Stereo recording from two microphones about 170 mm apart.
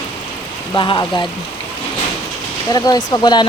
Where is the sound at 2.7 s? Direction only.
25° left (ahead or behind).